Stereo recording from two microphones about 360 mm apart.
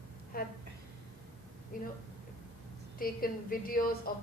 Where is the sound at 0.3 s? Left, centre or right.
Left.